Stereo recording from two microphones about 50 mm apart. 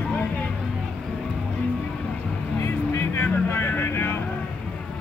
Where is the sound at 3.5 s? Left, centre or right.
Left.